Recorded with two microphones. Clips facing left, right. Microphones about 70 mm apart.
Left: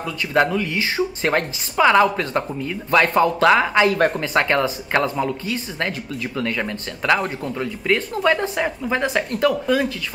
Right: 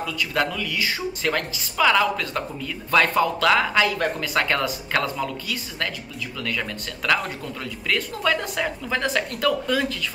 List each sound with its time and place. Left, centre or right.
0.0 s speech: left